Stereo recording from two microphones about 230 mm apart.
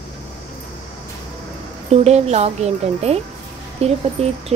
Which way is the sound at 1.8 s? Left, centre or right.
Right.